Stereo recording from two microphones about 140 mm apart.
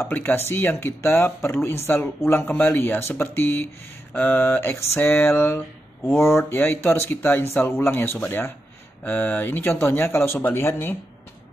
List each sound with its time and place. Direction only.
0.0 s speech: 15° left (ahead or behind)